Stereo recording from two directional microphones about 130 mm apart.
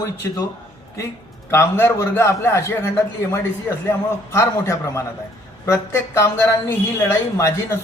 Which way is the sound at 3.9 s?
20° left (ahead or behind).